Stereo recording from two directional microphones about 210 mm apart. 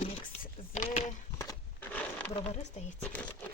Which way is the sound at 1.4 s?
10° left (ahead or behind).